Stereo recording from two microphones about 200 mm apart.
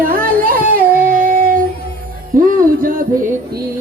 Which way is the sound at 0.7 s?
45° right (ahead or behind).